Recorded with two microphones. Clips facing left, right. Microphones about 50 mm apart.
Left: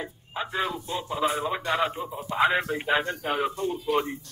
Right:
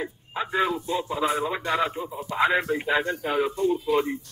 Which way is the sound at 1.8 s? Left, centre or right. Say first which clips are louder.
Right 1 dB; centre.